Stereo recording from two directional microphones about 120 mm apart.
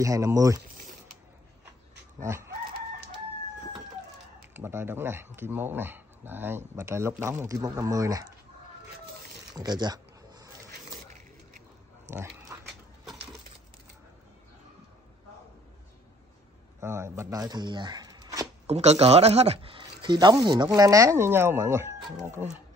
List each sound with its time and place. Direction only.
0.0 s speech: 30° right (ahead or behind)
2.1 s chicken: 20° right (ahead or behind)
4.6 s speech: 20° right (ahead or behind)
9.5 s a sound: 35° right (ahead or behind)
12.1 s dog: 20° right (ahead or behind)
16.8 s speech: 20° right (ahead or behind)
18.7 s speech: 65° right (ahead or behind); by 21.9 s 20° right (ahead or behind)